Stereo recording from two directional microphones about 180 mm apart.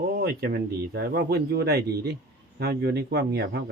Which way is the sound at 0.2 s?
60° right (ahead or behind).